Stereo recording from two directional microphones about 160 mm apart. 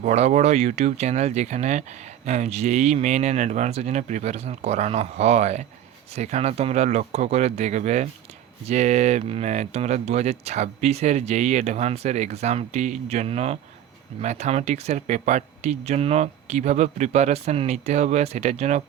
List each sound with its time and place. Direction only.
0.0 s speech: 45° right (ahead or behind)